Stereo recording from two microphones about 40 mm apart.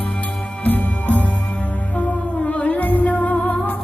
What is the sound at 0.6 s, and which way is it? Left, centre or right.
Music, left.